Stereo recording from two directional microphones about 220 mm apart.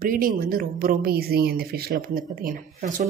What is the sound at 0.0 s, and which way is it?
Speech, 40° right (ahead or behind).